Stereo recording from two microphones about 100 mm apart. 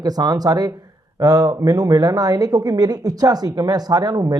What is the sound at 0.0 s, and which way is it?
Speech, 40° right (ahead or behind).